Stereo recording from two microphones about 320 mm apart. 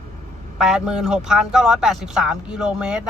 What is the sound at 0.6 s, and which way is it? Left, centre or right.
Speech, centre.